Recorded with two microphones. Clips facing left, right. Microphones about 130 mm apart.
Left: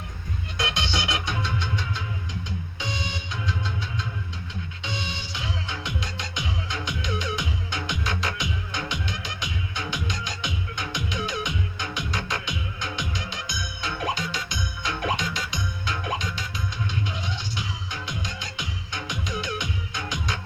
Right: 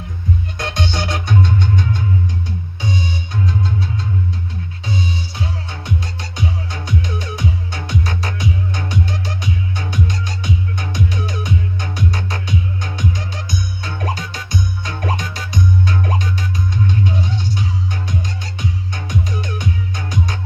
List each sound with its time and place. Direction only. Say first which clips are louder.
0.6 s music: right 3 dB; 45° right (ahead or behind)
4.9 s music: right 11 dB; 40° right (ahead or behind)